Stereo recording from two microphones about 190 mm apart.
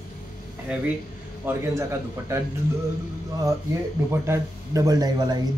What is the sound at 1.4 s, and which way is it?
A man's voice, 15° right (ahead or behind).